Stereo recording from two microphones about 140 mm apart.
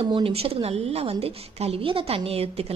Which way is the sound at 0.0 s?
45° right (ahead or behind).